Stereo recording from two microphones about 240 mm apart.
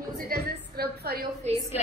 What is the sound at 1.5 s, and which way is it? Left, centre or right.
Speech, right.